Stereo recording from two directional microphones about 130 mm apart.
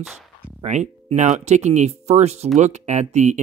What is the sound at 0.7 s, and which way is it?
Speech, 65° right (ahead or behind).